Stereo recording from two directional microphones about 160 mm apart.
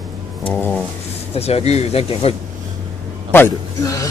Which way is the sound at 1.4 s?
40° left (ahead or behind).